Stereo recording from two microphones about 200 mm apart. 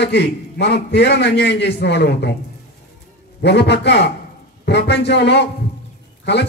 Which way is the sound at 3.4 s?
60° left (ahead or behind).